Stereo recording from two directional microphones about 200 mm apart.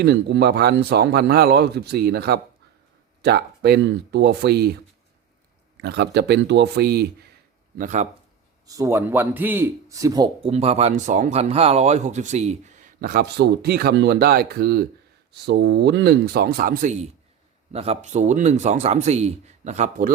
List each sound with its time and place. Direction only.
0.0 s a man's voice: 55° right (ahead or behind)
7.8 s a man's voice: 40° right (ahead or behind)
8.6 s a man's voice: 15° right (ahead or behind); by 20.1 s 40° right (ahead or behind)